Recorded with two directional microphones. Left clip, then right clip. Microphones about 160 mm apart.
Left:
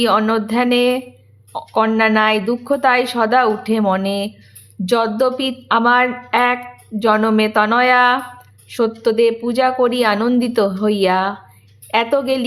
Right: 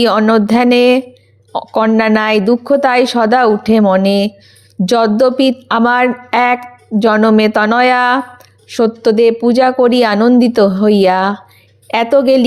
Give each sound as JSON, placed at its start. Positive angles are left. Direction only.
{"t": 0.0, "sound": "a woman's voice", "side_deg": -35}